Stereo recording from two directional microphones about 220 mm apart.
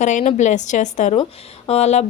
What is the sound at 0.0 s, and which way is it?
Speech, 35° left (ahead or behind).